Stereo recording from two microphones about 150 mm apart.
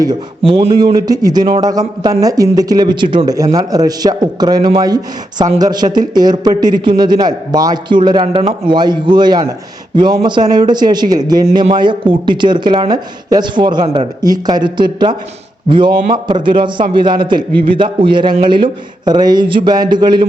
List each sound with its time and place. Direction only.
0.4 s a man's voice: 40° right (ahead or behind)
0.9 s a man's voice: 25° right (ahead or behind)